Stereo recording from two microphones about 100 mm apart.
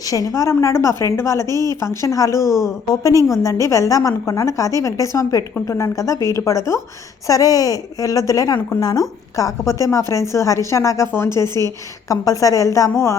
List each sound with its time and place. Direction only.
0.1 s a woman's voice: 35° left (ahead or behind)
1.5 s speech: 40° right (ahead or behind)
1.8 s a woman's voice: 30° left (ahead or behind)
12.0 s a woman's voice: 35° left (ahead or behind)